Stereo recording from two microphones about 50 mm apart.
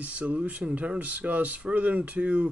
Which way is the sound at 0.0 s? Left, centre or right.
Right.